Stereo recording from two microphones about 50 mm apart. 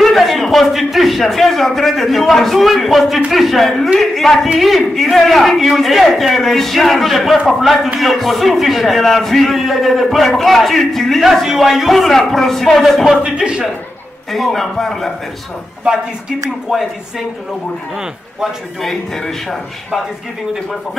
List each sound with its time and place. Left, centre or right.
0.0 s a man's voice: centre
13.2 s speech: centre
14.3 s a man's voice: centre
16.7 s speech: centre
18.8 s a man's voice: centre